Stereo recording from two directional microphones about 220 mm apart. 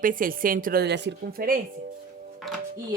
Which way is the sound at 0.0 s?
40° right (ahead or behind).